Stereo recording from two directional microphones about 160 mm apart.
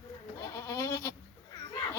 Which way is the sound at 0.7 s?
20° left (ahead or behind).